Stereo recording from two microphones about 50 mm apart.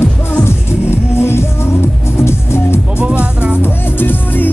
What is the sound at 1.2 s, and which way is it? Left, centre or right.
Music, left.